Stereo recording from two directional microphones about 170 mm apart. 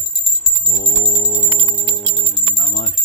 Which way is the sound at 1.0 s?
45° left (ahead or behind).